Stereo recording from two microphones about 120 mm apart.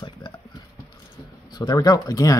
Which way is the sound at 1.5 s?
35° left (ahead or behind).